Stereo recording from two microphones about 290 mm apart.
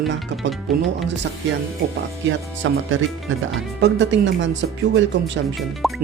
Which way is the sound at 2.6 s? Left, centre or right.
Right.